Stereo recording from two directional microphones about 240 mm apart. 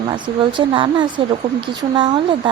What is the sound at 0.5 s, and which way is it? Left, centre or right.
Speech, centre.